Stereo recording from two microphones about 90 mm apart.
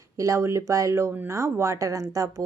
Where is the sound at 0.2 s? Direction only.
35° right (ahead or behind).